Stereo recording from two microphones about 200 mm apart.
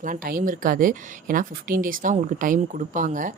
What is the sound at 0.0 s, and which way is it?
Speech, 45° right (ahead or behind).